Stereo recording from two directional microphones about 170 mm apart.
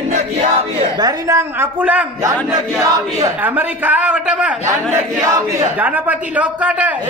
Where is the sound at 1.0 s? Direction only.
20° right (ahead or behind).